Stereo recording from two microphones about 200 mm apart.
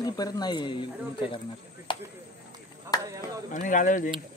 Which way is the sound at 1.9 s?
25° left (ahead or behind).